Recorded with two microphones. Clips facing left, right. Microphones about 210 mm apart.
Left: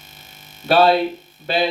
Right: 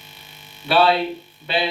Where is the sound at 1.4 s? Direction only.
45° left (ahead or behind).